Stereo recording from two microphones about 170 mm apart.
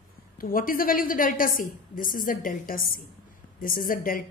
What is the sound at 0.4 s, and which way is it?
A woman's voice, 55° left (ahead or behind).